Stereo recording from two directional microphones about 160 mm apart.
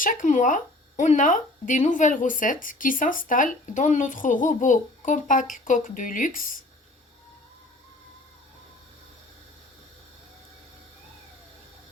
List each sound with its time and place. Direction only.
0.0 s speech: 55° left (ahead or behind)